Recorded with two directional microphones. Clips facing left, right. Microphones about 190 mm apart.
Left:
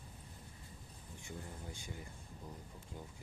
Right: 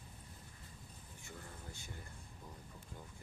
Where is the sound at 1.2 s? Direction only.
15° left (ahead or behind).